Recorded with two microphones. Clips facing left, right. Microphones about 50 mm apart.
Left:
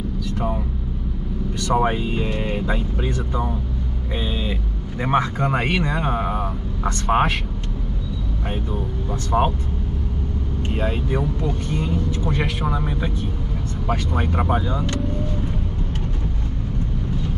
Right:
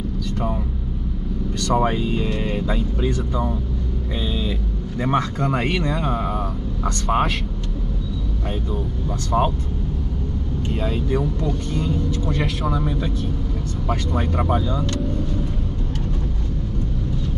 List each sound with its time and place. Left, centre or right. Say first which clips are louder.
0.2 s vehicle: even; centre
1.6 s speech: even; centre
9.3 s speech: even; centre
10.7 s speech: right 1 dB; left